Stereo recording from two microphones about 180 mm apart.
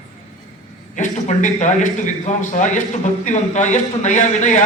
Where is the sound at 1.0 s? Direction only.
40° left (ahead or behind).